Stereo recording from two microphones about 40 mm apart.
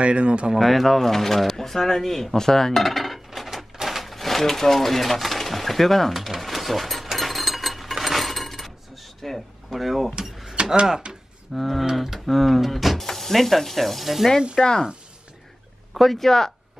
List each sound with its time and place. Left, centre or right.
0.0 s speech: right
0.6 s speech: centre
3.7 s sewing machine: centre
9.7 s speech: centre
10.8 s speech: right
11.5 s speech: centre
14.6 s speech: centre
15.9 s speech: centre